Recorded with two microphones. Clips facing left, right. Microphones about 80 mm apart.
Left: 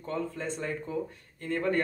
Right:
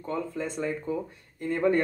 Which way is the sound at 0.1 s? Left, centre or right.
Centre.